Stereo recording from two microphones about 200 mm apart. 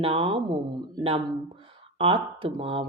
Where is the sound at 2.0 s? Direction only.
25° right (ahead or behind).